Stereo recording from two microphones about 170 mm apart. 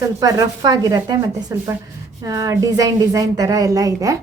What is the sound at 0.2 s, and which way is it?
A woman's voice, 20° right (ahead or behind).